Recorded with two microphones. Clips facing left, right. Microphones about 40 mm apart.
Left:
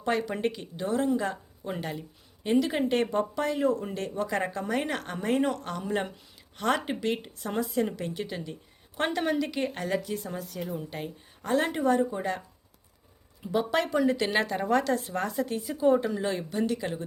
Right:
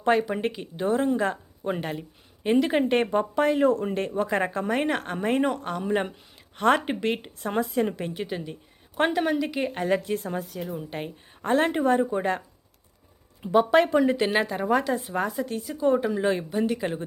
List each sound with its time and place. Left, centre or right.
0.2 s speech: centre
2.6 s speech: right
3.4 s speech: right; by 6.1 s centre
6.6 s a woman's voice: right
7.3 s a woman's voice: right
8.1 s speech: centre
9.8 s a woman's voice: right
10.5 s a woman's voice: centre
10.8 s speech: right
13.4 s speech: right
14.3 s speech: centre
16.0 s speech: centre